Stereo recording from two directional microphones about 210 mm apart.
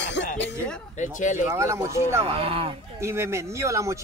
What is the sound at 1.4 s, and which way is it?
Speech, 15° right (ahead or behind).